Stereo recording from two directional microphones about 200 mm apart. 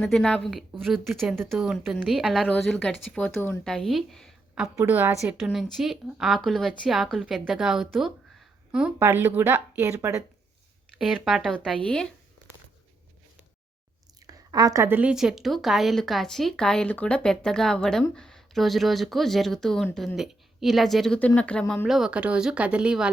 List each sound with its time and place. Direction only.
0.0 s a woman's voice: 5° left (ahead or behind)
14.3 s a woman's voice: 20° right (ahead or behind)